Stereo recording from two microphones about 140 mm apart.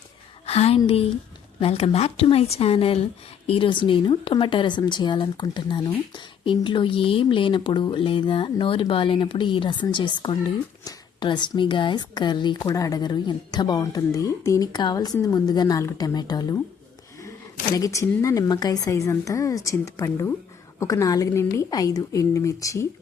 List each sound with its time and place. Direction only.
0.4 s a woman's voice: 45° left (ahead or behind); by 16.6 s 25° left (ahead or behind)
17.7 s speech: 25° left (ahead or behind)